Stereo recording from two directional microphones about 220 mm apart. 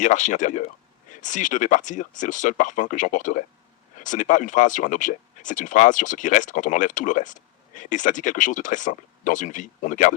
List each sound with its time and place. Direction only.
0.0 s speech: 35° left (ahead or behind)